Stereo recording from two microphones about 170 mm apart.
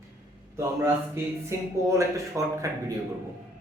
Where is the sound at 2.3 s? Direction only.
15° right (ahead or behind).